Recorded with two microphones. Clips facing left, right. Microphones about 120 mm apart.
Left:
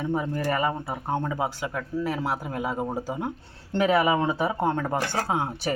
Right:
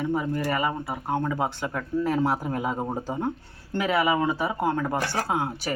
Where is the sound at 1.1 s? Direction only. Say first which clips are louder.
Right 1 dB; 20° left (ahead or behind).